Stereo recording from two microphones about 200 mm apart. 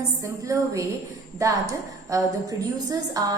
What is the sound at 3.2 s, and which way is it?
Speech, 20° right (ahead or behind).